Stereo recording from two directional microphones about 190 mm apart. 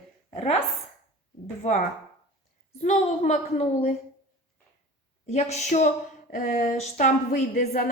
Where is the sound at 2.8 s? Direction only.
35° left (ahead or behind).